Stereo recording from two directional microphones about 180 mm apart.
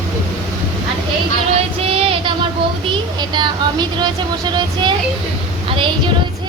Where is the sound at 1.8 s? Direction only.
30° right (ahead or behind).